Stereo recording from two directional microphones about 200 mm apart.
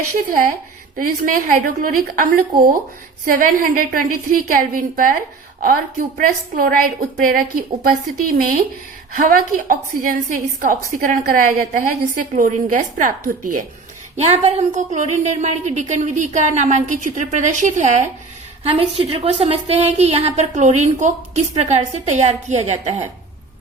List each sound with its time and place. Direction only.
0.3 s a woman's voice: 45° right (ahead or behind)
9.1 s a woman's voice: 45° right (ahead or behind)